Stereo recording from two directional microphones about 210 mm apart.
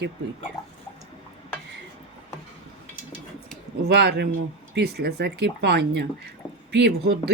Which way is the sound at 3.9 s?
50° right (ahead or behind).